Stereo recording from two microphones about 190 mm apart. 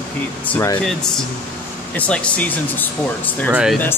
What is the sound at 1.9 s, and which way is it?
Speech, 5° left (ahead or behind).